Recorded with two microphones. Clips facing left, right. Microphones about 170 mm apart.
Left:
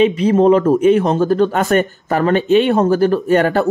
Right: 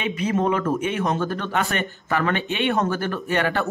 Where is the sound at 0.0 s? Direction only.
35° left (ahead or behind).